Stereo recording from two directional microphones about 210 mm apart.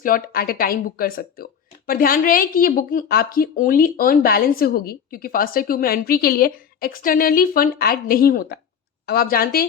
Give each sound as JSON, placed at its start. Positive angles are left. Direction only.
{"t": 0.0, "sound": "a woman's voice", "side_deg": 45}